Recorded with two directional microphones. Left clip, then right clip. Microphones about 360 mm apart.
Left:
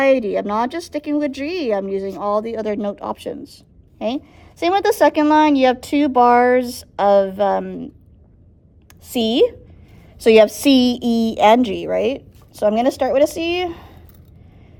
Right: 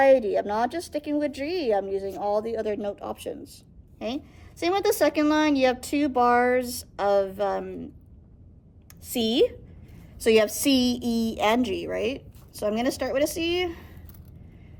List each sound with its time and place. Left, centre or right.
0.2 s a woman's voice: left
9.0 s speech: left